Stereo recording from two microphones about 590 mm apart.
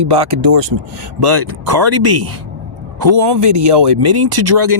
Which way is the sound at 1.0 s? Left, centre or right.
Right.